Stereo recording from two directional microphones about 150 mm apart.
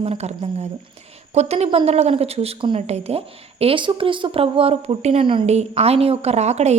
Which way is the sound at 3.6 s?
35° right (ahead or behind).